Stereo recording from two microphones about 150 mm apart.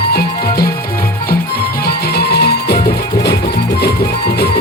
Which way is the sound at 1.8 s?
90° left.